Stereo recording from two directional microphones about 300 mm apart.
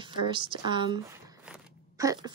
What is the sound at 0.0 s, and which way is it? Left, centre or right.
Speech, centre.